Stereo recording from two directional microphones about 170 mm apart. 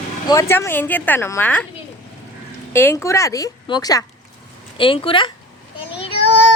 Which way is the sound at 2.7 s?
15° left (ahead or behind).